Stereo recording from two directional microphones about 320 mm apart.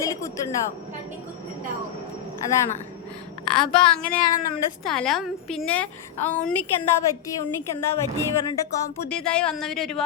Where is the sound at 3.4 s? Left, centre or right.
Centre.